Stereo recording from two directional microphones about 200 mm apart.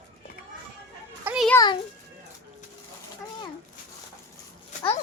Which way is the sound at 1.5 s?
20° left (ahead or behind).